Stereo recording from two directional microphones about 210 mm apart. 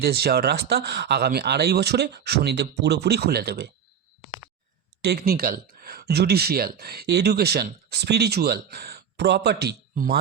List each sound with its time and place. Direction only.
0.0 s speech: 50° right (ahead or behind)
5.0 s speech: 50° right (ahead or behind)